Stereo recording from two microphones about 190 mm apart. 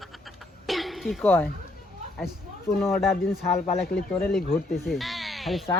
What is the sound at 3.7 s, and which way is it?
Speech, 5° left (ahead or behind).